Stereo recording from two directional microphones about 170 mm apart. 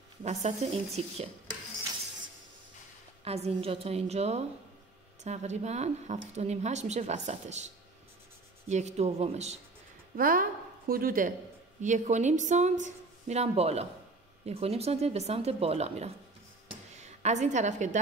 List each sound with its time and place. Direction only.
0.2 s speech: 40° right (ahead or behind)
3.3 s speech: 35° right (ahead or behind)
10.1 s a woman's voice: 55° right (ahead or behind); by 16.1 s 35° right (ahead or behind)
16.6 s a sound: 40° right (ahead or behind)